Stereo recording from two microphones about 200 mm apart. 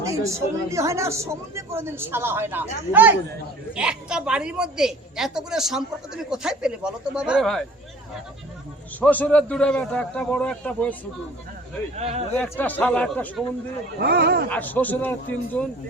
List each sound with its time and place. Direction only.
0.1 s a woman's voice: 15° right (ahead or behind)
9.0 s a man's voice: 10° left (ahead or behind)
11.9 s speech: 35° right (ahead or behind)
12.4 s a man's voice: 10° left (ahead or behind)
14.0 s speech: 55° right (ahead or behind)
14.5 s a man's voice: 10° left (ahead or behind)